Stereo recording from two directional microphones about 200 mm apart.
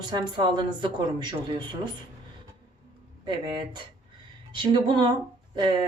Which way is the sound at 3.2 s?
20° right (ahead or behind).